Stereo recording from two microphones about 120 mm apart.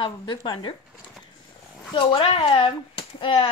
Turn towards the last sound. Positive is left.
turn(degrees=50)  # may be behind; listen again after turning